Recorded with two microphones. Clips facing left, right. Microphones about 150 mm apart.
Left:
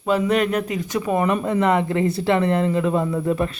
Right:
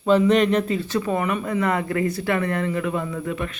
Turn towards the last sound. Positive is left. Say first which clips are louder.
# left 6 dB
turn(degrees=35)  # may be behind; listen again after turning